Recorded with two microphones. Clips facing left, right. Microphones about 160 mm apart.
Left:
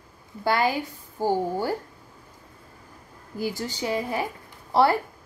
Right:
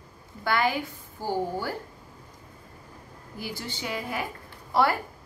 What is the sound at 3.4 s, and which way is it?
Speech, 40° left (ahead or behind).